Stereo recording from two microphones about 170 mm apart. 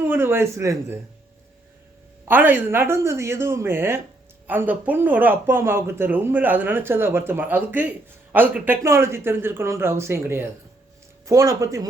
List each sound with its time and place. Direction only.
0.0 s speech: 15° right (ahead or behind)
2.2 s speech: 10° right (ahead or behind)